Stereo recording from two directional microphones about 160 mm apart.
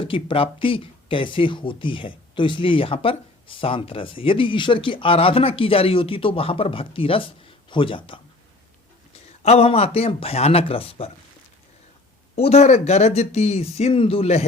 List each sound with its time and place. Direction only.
0.0 s speech: 35° left (ahead or behind)
9.4 s speech: 40° left (ahead or behind)
12.4 s speech: 40° left (ahead or behind)